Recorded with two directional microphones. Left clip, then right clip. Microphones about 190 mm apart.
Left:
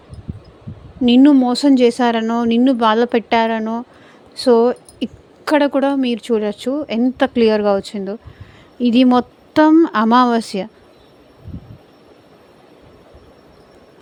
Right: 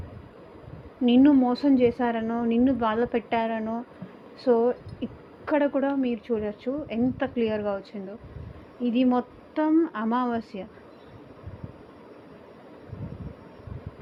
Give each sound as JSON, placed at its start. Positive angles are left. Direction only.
{"t": 1.0, "sound": "speech", "side_deg": 75}
{"t": 4.4, "sound": "speech", "side_deg": 90}